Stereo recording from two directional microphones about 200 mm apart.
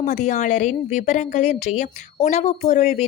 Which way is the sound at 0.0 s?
35° left (ahead or behind).